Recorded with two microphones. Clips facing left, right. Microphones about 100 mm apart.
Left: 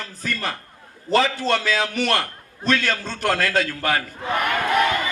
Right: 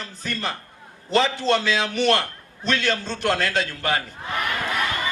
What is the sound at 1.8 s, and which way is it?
Music, 30° right (ahead or behind).